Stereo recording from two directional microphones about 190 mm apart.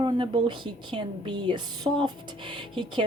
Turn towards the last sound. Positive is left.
turn(degrees=-25)  # may be behind; listen again after turning